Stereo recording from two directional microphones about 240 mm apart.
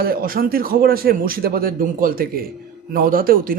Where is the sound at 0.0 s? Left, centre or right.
Right.